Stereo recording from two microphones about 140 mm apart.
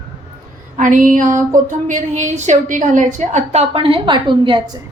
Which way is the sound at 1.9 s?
55° right (ahead or behind).